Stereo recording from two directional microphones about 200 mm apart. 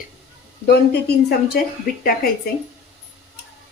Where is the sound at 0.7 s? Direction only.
55° left (ahead or behind).